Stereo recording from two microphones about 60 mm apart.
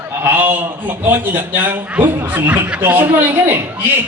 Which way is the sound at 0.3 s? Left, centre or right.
Right.